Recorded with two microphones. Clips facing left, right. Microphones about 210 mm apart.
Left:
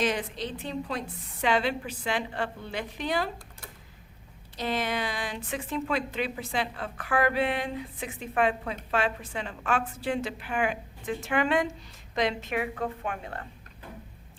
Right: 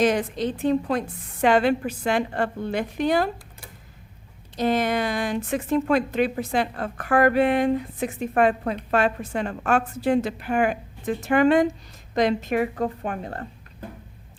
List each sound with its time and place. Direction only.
0.0 s a woman's voice: 45° right (ahead or behind)
4.5 s a woman's voice: 45° right (ahead or behind)